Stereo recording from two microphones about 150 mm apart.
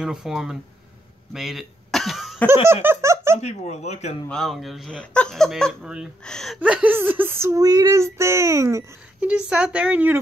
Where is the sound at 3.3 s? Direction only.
50° left (ahead or behind).